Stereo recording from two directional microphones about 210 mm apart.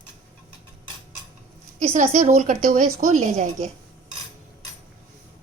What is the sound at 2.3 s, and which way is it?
Speech, 35° right (ahead or behind).